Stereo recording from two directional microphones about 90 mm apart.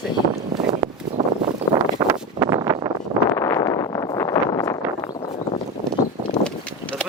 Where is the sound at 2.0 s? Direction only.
40° right (ahead or behind).